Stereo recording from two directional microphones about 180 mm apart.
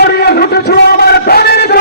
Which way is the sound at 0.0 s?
65° left (ahead or behind).